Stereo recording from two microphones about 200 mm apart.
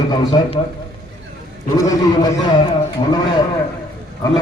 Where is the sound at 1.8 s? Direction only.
20° left (ahead or behind).